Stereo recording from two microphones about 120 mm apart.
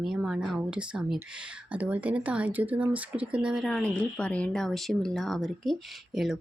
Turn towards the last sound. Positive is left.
turn(degrees=0)  # may be behind; listen again after turning